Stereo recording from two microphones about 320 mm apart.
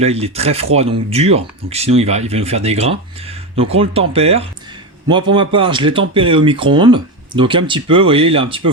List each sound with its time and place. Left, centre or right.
0.0 s speech: centre